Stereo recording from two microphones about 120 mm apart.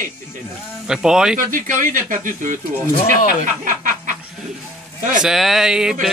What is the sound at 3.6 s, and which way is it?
Snicker, 90° right.